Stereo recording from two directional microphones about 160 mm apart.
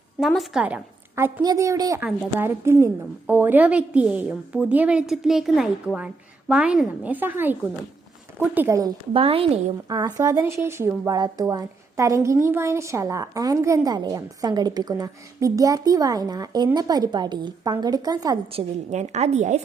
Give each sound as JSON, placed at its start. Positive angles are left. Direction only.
{"t": 0.2, "sound": "a woman's voice", "side_deg": 0}
{"t": 9.1, "sound": "a woman's voice", "side_deg": -35}
{"t": 9.9, "sound": "a woman's voice", "side_deg": -20}
{"t": 18.5, "sound": "a woman's voice", "side_deg": -45}